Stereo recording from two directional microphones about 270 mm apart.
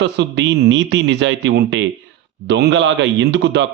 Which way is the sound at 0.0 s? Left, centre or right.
Right.